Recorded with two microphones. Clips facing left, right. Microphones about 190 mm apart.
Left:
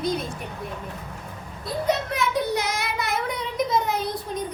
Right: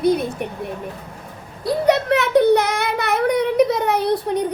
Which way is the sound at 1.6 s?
70° right (ahead or behind).